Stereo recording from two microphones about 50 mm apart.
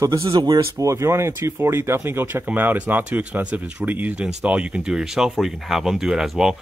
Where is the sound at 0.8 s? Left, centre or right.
Right.